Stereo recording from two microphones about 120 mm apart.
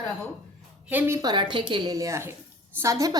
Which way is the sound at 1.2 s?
40° right (ahead or behind).